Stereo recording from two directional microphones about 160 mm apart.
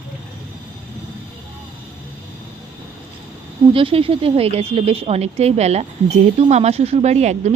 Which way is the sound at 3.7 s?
35° right (ahead or behind).